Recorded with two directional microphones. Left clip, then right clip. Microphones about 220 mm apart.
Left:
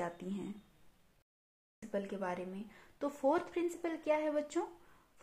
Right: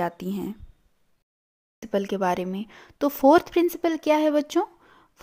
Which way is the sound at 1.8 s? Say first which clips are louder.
Right 14 dB; 45° right (ahead or behind).